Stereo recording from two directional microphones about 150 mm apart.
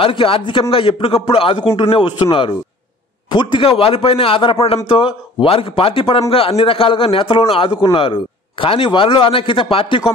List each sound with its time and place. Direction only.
0.0 s a man's voice: 35° left (ahead or behind)
3.3 s a man's voice: 30° left (ahead or behind)